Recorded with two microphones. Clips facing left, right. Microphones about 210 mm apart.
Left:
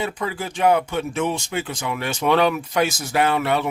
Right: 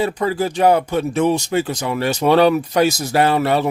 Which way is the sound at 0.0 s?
35° right (ahead or behind).